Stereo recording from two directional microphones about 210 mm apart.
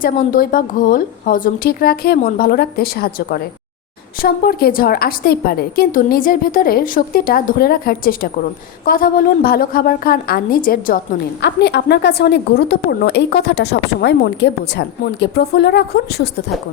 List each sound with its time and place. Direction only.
0.0 s a woman's voice: 40° left (ahead or behind)
11.4 s a woman's voice: 55° left (ahead or behind)